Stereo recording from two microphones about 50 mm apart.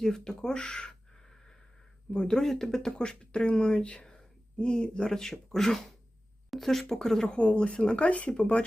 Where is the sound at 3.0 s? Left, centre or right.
Centre.